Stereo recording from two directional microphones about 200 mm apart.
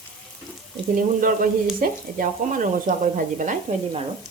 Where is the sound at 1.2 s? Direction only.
45° right (ahead or behind).